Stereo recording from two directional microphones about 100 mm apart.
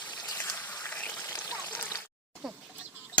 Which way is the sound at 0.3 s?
20° left (ahead or behind).